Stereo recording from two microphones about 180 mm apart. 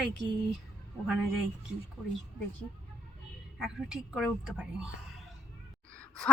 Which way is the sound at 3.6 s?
Centre (ahead or behind).